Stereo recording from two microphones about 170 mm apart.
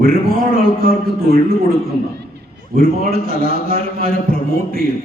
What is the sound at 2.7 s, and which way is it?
A man's voice, 55° right (ahead or behind).